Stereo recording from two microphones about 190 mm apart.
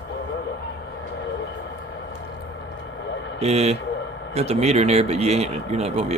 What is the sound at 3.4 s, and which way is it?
Speech, 35° right (ahead or behind).